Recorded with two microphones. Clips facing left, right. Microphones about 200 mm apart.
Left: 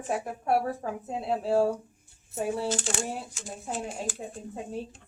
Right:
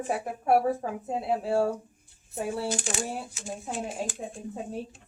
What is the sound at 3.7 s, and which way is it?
Speech, 5° left (ahead or behind).